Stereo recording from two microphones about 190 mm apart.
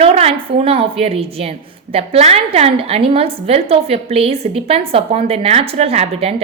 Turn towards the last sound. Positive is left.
turn(degrees=-30)  # may be behind; listen again after turning